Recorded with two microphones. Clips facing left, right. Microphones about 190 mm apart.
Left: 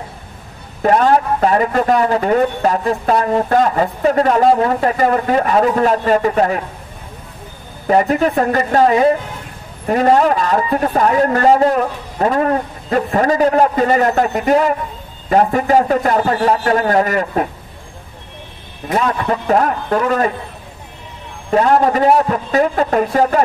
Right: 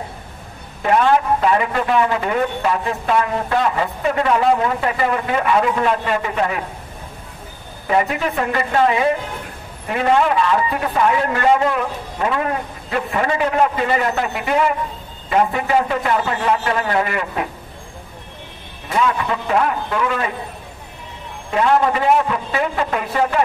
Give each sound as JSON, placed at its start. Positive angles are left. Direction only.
{"t": 0.8, "sound": "a man's voice", "side_deg": 40}
{"t": 7.8, "sound": "a man's voice", "side_deg": 40}
{"t": 18.9, "sound": "a man's voice", "side_deg": 40}
{"t": 21.5, "sound": "a man's voice", "side_deg": 40}